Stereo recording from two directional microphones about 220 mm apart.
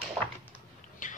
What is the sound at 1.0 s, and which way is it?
Whispering, 35° left (ahead or behind).